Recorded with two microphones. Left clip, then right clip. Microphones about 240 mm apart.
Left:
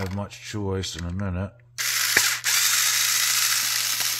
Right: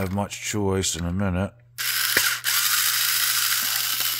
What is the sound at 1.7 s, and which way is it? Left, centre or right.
Ratchet, centre.